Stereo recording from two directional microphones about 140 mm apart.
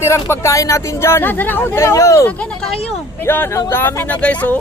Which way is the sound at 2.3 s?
10° left (ahead or behind).